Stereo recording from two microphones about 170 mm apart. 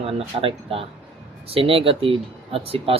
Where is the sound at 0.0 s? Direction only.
35° right (ahead or behind).